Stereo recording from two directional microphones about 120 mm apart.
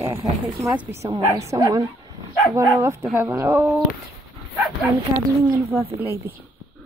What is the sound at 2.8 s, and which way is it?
Speech, 20° right (ahead or behind).